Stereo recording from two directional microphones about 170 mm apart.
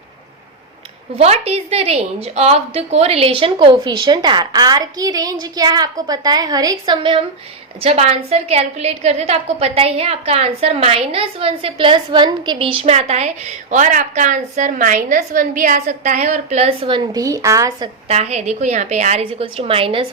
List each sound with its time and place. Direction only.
1.2 s a woman's voice: 35° right (ahead or behind); by 17.8 s 20° right (ahead or behind)
18.1 s a woman's voice: 40° right (ahead or behind)